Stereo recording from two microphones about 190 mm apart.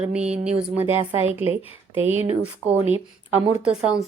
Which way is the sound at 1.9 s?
10° right (ahead or behind).